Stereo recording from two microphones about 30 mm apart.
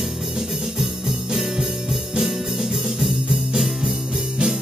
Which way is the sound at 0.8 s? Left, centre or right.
Centre.